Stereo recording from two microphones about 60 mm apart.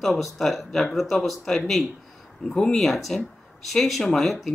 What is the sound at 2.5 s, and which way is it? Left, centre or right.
Speech, centre.